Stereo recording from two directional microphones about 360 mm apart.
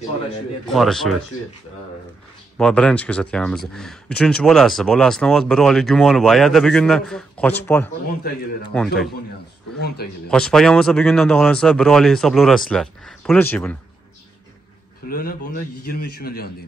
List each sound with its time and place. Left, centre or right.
0.7 s speech: centre
2.5 s speech: centre
9.8 s a man's voice: left
10.3 s speech: centre
15.0 s a man's voice: left